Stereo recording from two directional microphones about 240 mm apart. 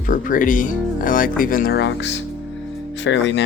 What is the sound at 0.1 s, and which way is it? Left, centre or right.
Speech, left.